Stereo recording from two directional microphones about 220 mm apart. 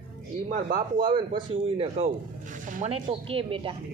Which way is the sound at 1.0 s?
25° right (ahead or behind).